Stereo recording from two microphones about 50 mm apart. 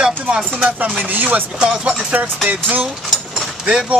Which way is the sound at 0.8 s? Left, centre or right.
Right.